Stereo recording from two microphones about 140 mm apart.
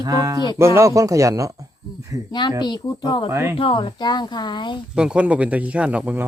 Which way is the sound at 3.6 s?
40° left (ahead or behind).